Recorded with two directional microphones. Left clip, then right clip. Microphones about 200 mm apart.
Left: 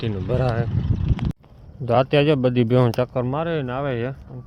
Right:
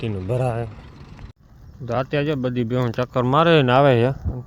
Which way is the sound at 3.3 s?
35° right (ahead or behind).